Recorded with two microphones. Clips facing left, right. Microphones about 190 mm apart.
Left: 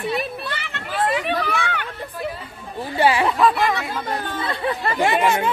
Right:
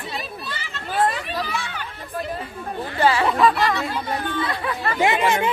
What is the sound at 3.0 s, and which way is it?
Speech, 10° left (ahead or behind).